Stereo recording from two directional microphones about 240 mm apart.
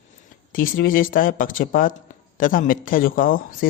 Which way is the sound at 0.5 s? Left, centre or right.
Left.